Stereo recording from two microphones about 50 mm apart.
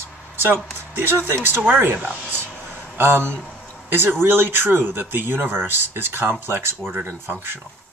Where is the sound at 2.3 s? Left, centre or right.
Right.